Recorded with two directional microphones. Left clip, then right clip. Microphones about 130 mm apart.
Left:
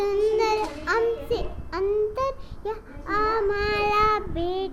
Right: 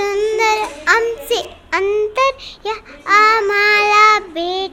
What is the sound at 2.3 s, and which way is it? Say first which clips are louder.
Child singing: right 10 dB; 20° right (ahead or behind).